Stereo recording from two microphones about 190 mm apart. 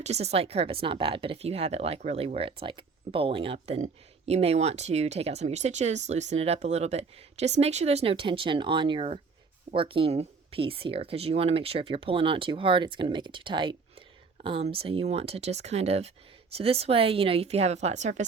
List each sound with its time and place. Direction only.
0.0 s speech: 35° right (ahead or behind)